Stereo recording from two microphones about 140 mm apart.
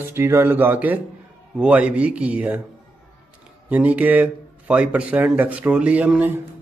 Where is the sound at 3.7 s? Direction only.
10° right (ahead or behind).